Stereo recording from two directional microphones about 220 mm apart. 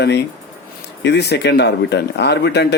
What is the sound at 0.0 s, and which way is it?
Speech, 50° left (ahead or behind).